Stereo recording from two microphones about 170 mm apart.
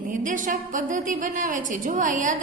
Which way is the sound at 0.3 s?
50° right (ahead or behind).